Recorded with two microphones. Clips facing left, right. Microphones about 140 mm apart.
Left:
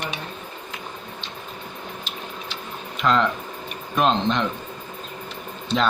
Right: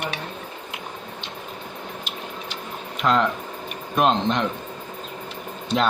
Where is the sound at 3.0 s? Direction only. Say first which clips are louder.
Even; 5° right (ahead or behind).